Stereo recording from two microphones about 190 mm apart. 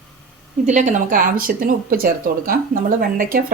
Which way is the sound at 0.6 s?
40° right (ahead or behind).